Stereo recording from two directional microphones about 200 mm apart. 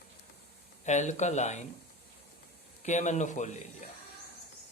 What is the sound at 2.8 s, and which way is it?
Speech, 35° left (ahead or behind).